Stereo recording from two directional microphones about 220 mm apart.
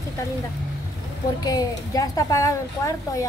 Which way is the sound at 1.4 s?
15° left (ahead or behind).